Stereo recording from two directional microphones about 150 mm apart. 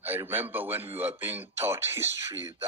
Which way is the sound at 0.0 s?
15° right (ahead or behind).